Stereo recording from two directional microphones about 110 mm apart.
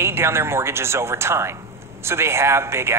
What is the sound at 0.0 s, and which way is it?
A man's voice, 25° right (ahead or behind).